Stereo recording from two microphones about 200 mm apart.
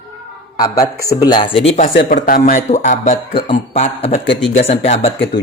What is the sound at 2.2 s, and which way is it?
Speech, 45° left (ahead or behind).